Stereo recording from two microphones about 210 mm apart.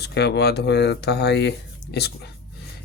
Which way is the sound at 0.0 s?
50° left (ahead or behind).